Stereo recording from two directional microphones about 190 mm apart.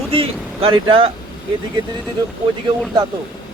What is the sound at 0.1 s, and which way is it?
Speech, 30° right (ahead or behind).